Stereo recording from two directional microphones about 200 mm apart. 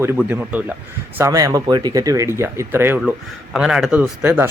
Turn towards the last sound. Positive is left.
turn(degrees=-10)  # may be behind; listen again after turning